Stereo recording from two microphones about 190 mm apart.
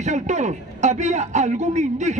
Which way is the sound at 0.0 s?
40° right (ahead or behind).